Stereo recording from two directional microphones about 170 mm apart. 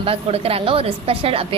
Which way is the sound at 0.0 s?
35° right (ahead or behind).